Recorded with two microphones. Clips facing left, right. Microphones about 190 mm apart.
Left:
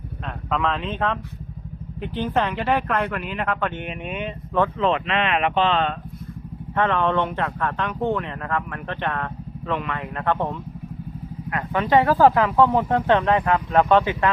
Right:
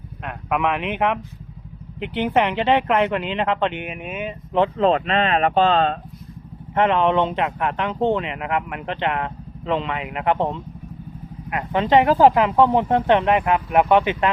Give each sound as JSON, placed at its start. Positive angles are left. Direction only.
{"t": 0.3, "sound": "speech", "side_deg": -10}
{"t": 2.2, "sound": "speech", "side_deg": -20}
{"t": 3.8, "sound": "speech", "side_deg": -5}
{"t": 4.8, "sound": "speech", "side_deg": -35}
{"t": 6.7, "sound": "speech", "side_deg": -20}